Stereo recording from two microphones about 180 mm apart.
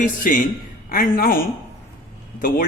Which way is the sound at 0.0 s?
45° left (ahead or behind).